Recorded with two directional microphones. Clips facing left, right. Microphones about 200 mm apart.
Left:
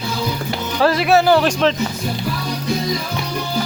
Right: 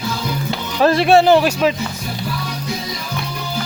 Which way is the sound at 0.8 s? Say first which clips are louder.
Right 3 dB; 25° right (ahead or behind).